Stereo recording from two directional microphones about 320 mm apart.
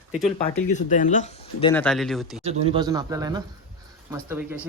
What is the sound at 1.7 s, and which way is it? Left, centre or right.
Speech, centre.